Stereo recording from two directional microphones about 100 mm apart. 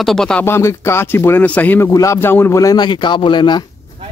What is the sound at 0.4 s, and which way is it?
Speech, 25° left (ahead or behind).